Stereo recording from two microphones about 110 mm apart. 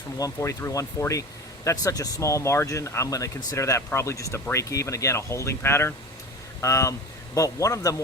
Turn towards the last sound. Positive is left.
turn(degrees=30)  # may be behind; listen again after turning